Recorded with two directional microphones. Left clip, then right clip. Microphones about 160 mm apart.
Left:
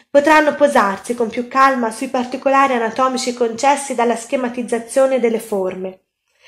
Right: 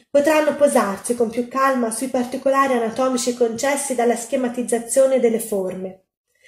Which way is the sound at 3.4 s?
Centre (ahead or behind).